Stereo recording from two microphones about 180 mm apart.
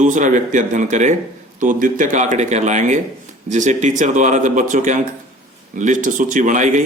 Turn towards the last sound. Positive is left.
turn(degrees=-45)  # may be behind; listen again after turning